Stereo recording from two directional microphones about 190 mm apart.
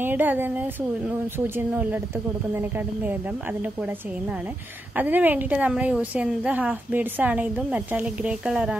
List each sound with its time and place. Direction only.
0.0 s a woman's voice: 10° right (ahead or behind)
4.9 s a woman's voice: 10° right (ahead or behind)